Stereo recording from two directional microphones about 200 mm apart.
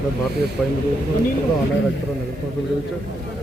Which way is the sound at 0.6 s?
Centre (ahead or behind).